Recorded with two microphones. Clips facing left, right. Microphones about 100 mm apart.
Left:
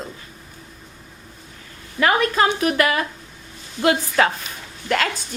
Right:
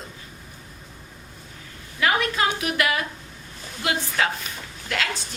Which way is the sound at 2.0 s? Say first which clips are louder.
Left 5 dB; 40° left (ahead or behind).